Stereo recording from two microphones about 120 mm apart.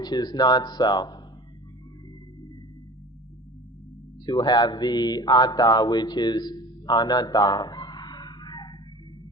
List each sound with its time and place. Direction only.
0.0 s speech: 35° left (ahead or behind)
4.3 s mantra: 35° left (ahead or behind)